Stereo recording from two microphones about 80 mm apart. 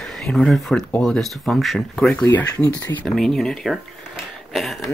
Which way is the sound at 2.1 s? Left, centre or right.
Left.